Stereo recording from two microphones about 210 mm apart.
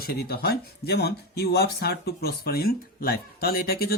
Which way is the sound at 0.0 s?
50° left (ahead or behind).